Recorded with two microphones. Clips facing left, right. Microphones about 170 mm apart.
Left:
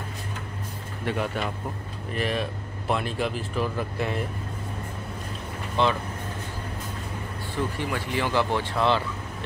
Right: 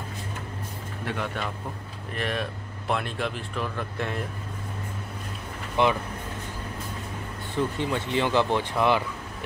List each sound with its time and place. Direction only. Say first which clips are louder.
1.0 s speech: left 3 dB; 5° left (ahead or behind)
5.8 s speech: right 1 dB; 15° right (ahead or behind)
7.5 s speech: right 2 dB; 20° right (ahead or behind)